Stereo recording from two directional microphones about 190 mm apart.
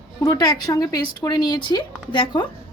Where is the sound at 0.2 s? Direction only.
20° left (ahead or behind).